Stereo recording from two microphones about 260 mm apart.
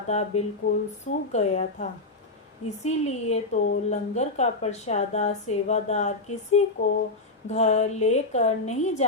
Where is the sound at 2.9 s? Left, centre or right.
Left.